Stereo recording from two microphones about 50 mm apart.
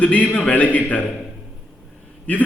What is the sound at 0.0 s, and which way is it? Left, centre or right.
A man's voice, left.